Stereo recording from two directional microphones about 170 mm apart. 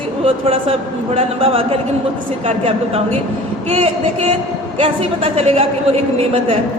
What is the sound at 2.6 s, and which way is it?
A man's voice, 35° right (ahead or behind).